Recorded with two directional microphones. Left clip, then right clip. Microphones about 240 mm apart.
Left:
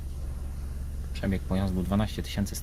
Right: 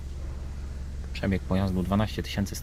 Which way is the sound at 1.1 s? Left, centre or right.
Centre.